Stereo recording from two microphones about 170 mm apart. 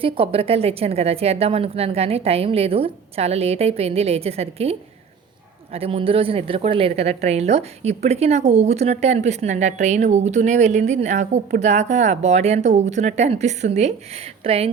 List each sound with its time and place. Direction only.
0.0 s a woman's voice: 30° right (ahead or behind)